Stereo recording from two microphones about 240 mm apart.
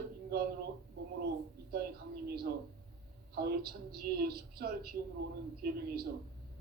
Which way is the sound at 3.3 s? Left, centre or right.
Right.